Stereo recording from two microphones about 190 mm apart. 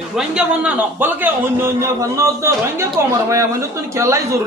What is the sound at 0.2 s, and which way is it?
A man's voice, 5° right (ahead or behind).